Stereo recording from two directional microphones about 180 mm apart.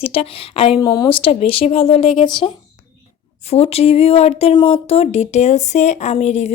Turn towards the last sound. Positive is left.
turn(degrees=35)  # may be behind; listen again after turning